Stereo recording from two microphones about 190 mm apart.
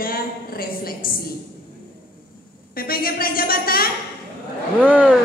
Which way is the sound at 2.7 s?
50° left (ahead or behind).